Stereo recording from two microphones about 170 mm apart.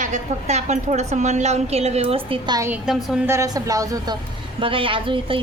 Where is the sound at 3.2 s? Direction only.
20° right (ahead or behind).